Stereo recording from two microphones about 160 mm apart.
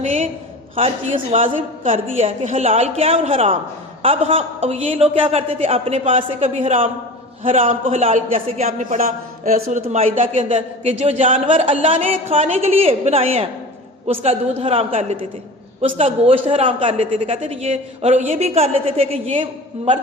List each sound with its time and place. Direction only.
0.0 s a sound: 45° right (ahead or behind)
1.1 s a man's voice: 50° right (ahead or behind)
10.2 s a man's voice: 45° right (ahead or behind)